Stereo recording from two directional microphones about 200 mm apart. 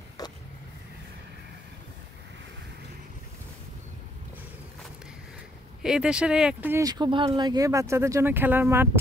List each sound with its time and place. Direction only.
0.2 s vehicle: 20° left (ahead or behind)
5.8 s speech: 5° right (ahead or behind)